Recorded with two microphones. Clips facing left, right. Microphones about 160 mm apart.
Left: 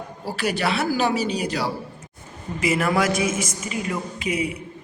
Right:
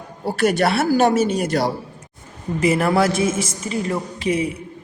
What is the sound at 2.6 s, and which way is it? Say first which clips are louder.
Speech: right 4 dB; 30° right (ahead or behind).